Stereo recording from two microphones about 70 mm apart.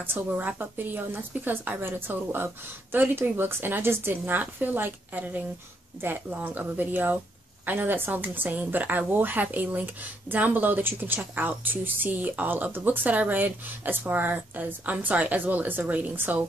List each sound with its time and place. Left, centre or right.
0.0 s a woman's voice: right